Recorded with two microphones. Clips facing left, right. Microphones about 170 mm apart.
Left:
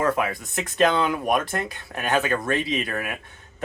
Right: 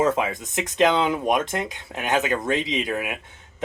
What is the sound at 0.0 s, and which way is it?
Speech, 20° right (ahead or behind).